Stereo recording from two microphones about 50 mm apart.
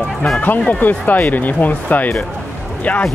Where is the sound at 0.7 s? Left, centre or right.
Left.